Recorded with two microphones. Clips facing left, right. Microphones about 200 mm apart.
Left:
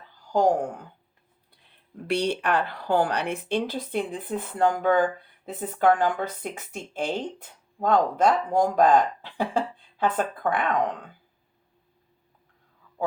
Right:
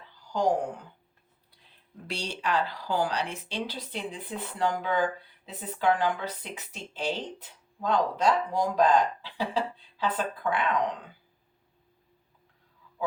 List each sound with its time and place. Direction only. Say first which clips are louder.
0.3 s speech: left 5 dB; 50° left (ahead or behind)
2.0 s a woman's voice: left 8 dB; 60° left (ahead or behind)